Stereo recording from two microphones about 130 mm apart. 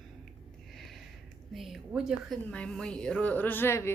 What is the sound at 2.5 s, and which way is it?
A woman's voice, 5° left (ahead or behind).